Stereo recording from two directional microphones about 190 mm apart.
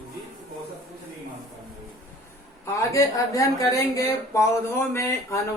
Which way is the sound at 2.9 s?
15° left (ahead or behind).